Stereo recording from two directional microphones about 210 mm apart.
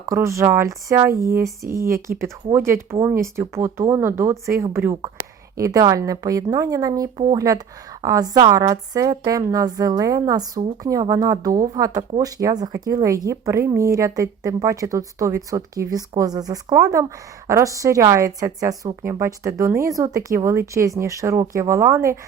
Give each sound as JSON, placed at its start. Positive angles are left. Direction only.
{"t": 0.0, "sound": "speech", "side_deg": -15}